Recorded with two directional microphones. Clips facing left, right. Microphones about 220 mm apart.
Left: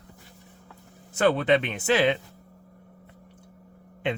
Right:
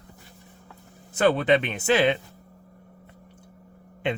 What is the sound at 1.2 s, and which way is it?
Speech, 15° right (ahead or behind).